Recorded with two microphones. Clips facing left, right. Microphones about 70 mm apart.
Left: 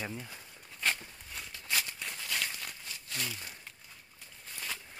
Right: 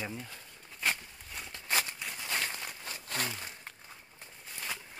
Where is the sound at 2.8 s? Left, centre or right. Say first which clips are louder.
Right 4 dB; right.